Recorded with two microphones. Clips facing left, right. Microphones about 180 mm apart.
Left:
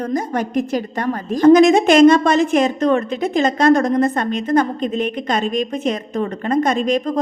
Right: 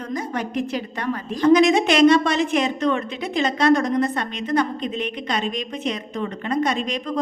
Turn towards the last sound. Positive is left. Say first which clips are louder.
# left 7 dB
turn(degrees=45)  # may be behind; listen again after turning